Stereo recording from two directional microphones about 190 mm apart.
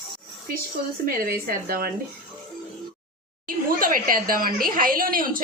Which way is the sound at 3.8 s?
50° right (ahead or behind).